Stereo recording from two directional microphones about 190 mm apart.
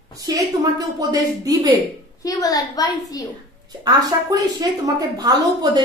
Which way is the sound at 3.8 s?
20° right (ahead or behind).